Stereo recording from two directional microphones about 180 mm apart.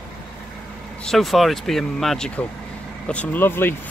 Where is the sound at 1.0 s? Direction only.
Centre (ahead or behind).